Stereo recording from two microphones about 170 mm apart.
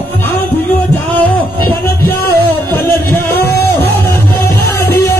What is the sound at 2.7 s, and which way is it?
Music, 10° left (ahead or behind).